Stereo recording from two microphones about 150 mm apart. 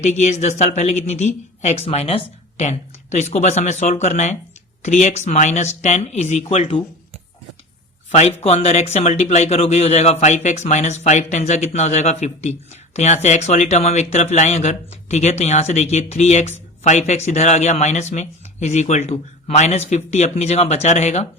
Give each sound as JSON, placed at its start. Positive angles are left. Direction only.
{"t": 0.0, "sound": "speech", "side_deg": 50}
{"t": 6.5, "sound": "speech", "side_deg": 40}
{"t": 8.1, "sound": "speech", "side_deg": 45}